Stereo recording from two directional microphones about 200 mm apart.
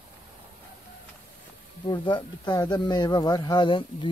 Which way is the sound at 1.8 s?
25° left (ahead or behind).